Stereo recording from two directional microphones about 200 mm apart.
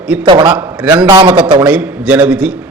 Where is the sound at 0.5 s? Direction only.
5° right (ahead or behind).